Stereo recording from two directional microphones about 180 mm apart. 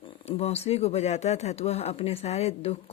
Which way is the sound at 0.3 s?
35° left (ahead or behind).